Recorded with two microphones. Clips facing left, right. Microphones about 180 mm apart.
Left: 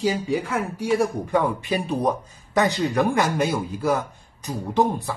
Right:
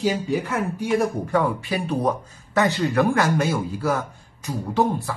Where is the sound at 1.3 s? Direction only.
20° left (ahead or behind).